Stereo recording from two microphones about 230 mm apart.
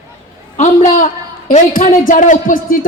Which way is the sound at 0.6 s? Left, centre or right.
Left.